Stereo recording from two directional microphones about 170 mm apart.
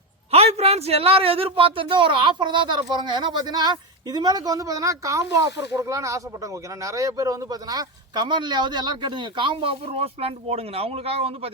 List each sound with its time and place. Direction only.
0.3 s a man's voice: 35° right (ahead or behind)